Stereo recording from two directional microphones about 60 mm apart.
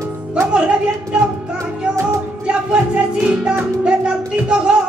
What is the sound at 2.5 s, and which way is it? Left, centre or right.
Music, centre.